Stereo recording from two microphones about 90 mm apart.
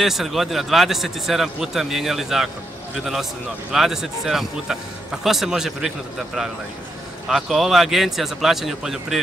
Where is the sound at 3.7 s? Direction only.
5° right (ahead or behind).